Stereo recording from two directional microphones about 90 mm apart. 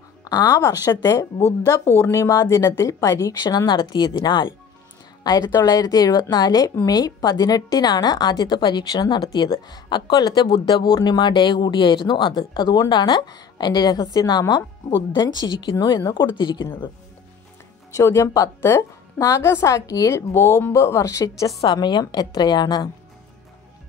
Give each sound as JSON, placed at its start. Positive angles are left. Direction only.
{"t": 0.2, "sound": "a woman's voice", "side_deg": 50}
{"t": 5.6, "sound": "a woman's voice", "side_deg": 45}
{"t": 17.9, "sound": "a woman's voice", "side_deg": 35}
{"t": 21.6, "sound": "a woman's voice", "side_deg": 55}